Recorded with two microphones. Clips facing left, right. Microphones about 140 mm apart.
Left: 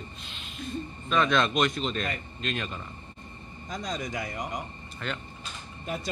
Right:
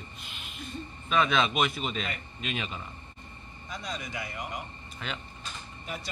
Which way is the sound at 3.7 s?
45° left (ahead or behind).